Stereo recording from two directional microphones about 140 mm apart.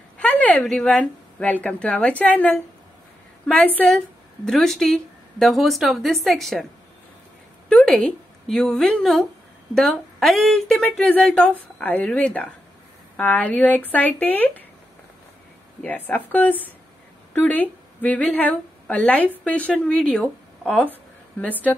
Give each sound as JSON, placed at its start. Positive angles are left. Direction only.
{"t": 0.2, "sound": "speech", "side_deg": 10}
{"t": 7.7, "sound": "a woman's voice", "side_deg": 5}
{"t": 16.3, "sound": "a woman's voice", "side_deg": 10}